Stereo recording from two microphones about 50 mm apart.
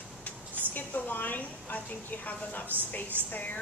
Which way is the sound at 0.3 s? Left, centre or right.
Left.